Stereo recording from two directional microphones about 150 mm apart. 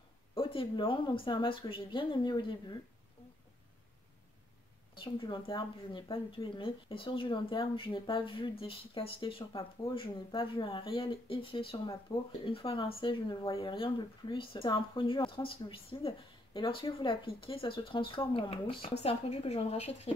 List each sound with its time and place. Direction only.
0.3 s speech: 35° left (ahead or behind)
4.9 s a woman's voice: 35° left (ahead or behind)
12.1 s speech: 20° left (ahead or behind)
12.4 s speech: 35° left (ahead or behind)